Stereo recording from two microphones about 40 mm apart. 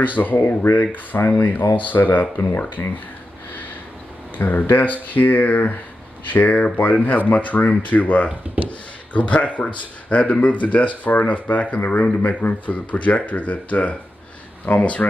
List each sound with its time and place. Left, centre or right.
0.1 s speech: left
0.7 s speech: left
1.4 s speech: left
2.8 s speech: left
4.4 s speech: left